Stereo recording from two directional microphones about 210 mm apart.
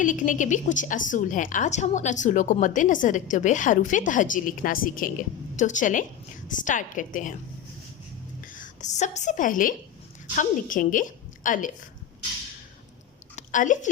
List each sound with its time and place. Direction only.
0.0 s a woman's voice: 40° left (ahead or behind)
8.5 s a woman's voice: 35° left (ahead or behind)
13.3 s a woman's voice: 35° left (ahead or behind)